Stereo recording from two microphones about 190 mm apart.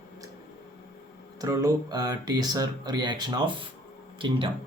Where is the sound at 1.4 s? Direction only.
20° right (ahead or behind).